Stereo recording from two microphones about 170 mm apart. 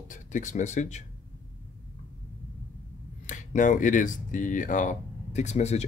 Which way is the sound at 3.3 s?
50° left (ahead or behind).